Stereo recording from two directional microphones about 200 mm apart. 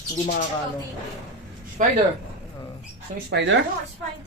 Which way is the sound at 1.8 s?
40° right (ahead or behind).